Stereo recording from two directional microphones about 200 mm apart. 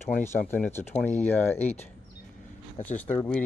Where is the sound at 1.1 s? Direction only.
35° left (ahead or behind).